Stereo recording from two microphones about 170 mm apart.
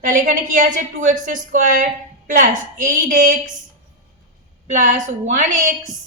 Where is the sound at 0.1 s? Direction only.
50° right (ahead or behind).